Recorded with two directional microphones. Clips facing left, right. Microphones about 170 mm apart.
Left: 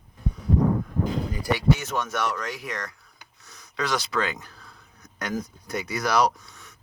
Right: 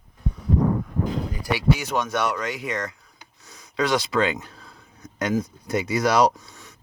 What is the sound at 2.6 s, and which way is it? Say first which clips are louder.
Speech: right 5 dB; 25° right (ahead or behind).